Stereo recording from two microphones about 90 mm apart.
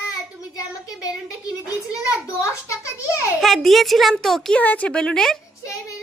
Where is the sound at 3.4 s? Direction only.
Centre (ahead or behind).